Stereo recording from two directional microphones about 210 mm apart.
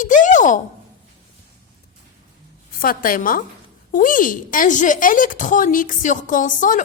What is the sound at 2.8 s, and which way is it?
A woman's voice, 40° left (ahead or behind).